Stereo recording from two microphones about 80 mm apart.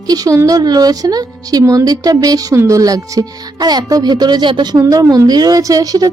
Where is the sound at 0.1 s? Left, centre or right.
Right.